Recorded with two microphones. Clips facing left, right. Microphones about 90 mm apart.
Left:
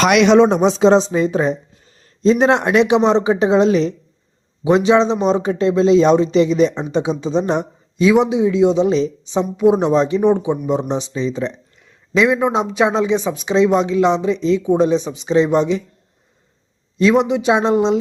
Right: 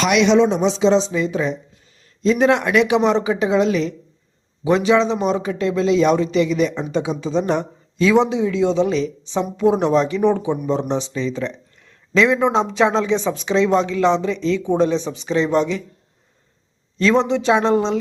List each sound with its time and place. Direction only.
0.0 s a man's voice: 55° left (ahead or behind); by 15.8 s 20° left (ahead or behind)
17.0 s speech: 10° left (ahead or behind)